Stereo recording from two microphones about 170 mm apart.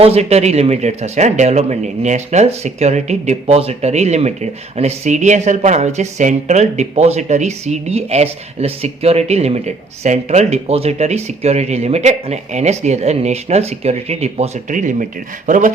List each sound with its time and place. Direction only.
0.0 s speech: 35° right (ahead or behind)